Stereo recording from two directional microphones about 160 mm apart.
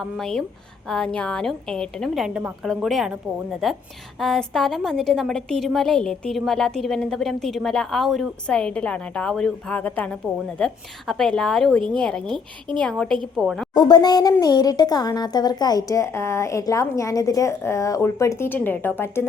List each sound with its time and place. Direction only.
0.0 s a woman's voice: 5° left (ahead or behind)
13.7 s speech: 25° left (ahead or behind)